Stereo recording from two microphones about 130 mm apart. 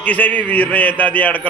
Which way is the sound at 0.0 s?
15° left (ahead or behind).